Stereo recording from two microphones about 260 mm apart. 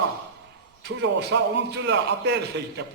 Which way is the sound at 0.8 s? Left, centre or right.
Right.